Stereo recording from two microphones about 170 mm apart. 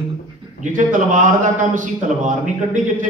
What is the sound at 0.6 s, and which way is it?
A man's voice, 50° right (ahead or behind).